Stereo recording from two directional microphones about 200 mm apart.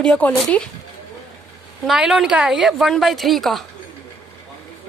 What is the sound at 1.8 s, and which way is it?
A woman's voice, centre (ahead or behind).